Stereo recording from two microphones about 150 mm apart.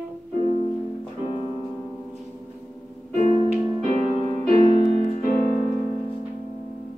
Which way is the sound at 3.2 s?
40° right (ahead or behind).